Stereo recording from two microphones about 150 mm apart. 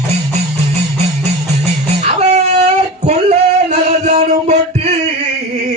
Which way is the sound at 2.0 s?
50° right (ahead or behind).